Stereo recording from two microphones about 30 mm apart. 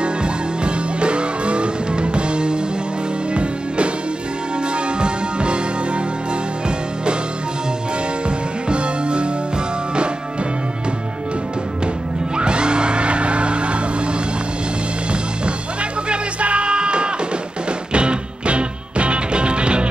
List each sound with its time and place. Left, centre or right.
0.0 s music: right
5.0 s music: right
8.6 s music: right
12.4 s music: right
16.1 s music: right